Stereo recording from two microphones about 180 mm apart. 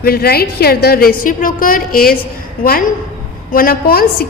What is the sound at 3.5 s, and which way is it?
Speech, 55° left (ahead or behind).